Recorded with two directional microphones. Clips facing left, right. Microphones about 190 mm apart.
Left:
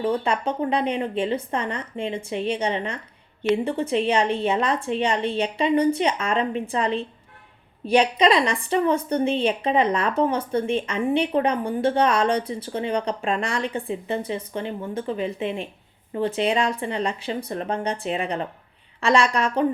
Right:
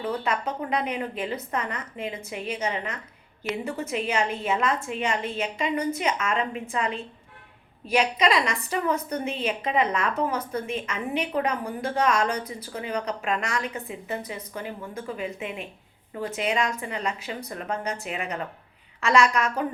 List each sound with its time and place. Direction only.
0.0 s a woman's voice: 30° left (ahead or behind)